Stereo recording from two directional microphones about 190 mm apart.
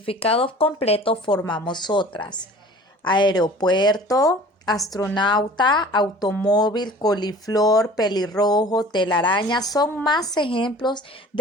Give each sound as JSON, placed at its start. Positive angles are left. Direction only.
{"t": 0.0, "sound": "speech", "side_deg": 30}